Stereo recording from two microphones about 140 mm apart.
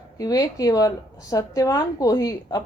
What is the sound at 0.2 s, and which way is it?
A woman's voice, 25° left (ahead or behind).